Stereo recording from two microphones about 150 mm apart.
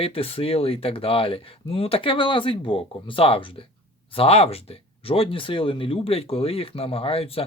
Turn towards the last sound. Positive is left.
turn(degrees=40)  # may be behind; listen again after turning